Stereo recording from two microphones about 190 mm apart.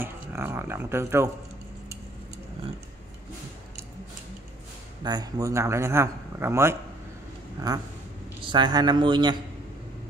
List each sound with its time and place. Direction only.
0.0 s speech: 10° right (ahead or behind)
5.0 s a man's voice: 20° right (ahead or behind)